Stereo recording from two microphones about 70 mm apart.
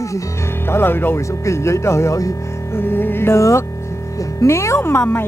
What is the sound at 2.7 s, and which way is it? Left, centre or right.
A woman's voice, left.